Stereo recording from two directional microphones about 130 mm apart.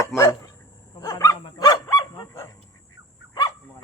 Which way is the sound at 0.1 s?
5° left (ahead or behind).